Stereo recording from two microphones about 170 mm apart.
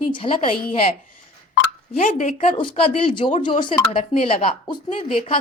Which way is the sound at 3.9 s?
40° left (ahead or behind).